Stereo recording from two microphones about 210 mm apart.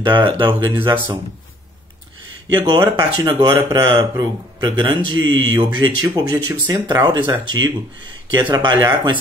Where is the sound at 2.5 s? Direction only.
20° right (ahead or behind).